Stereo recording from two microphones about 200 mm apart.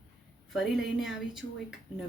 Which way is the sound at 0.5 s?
Centre (ahead or behind).